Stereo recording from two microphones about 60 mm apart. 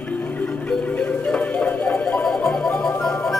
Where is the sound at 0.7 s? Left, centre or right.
Left.